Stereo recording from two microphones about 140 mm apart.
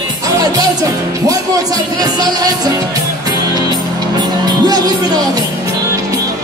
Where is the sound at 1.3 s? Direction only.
25° right (ahead or behind).